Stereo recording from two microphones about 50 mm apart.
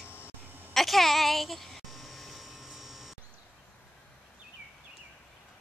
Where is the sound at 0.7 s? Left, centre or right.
Centre.